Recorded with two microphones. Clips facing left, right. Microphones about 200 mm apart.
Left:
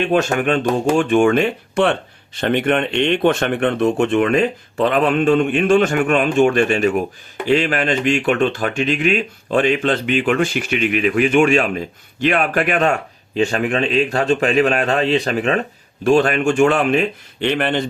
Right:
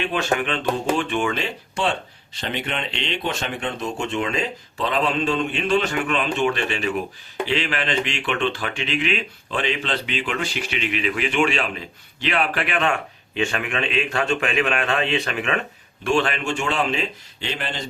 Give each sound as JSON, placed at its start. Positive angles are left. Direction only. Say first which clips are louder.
{"t": 0.0, "sound": "speech", "louder": "left 6 dB", "side_deg": 45}